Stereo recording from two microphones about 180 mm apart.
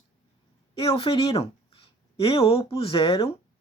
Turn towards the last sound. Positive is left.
turn(degrees=30)  # may be behind; listen again after turning